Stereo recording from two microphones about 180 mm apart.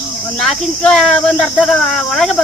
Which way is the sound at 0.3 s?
Centre (ahead or behind).